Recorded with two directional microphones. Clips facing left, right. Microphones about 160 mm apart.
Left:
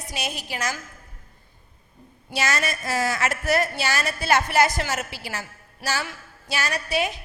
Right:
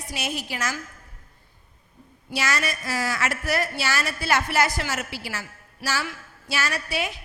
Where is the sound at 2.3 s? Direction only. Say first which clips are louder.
Left 1 dB; 25° left (ahead or behind).